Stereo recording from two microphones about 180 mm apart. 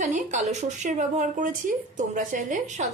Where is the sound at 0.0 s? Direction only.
45° right (ahead or behind).